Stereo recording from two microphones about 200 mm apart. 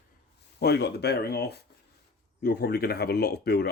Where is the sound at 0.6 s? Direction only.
55° left (ahead or behind).